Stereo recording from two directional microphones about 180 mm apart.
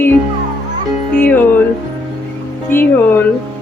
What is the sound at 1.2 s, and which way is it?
Music, 10° left (ahead or behind).